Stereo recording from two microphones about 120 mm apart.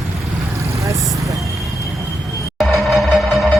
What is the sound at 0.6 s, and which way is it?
Vehicle, 25° right (ahead or behind).